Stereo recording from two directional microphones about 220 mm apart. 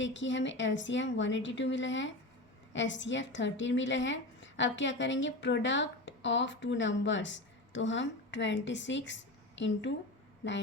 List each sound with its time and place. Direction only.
0.0 s a woman's voice: 55° left (ahead or behind)